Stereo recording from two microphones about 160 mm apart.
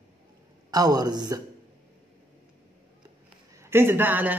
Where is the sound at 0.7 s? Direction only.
25° right (ahead or behind).